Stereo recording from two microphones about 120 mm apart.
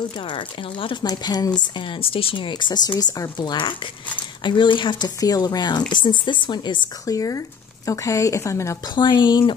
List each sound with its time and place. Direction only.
0.2 s speech: 45° left (ahead or behind)
1.0 s speech: 35° left (ahead or behind)
1.8 s speech: 45° left (ahead or behind); by 8.9 s 25° left (ahead or behind)
8.9 s speech: 40° left (ahead or behind)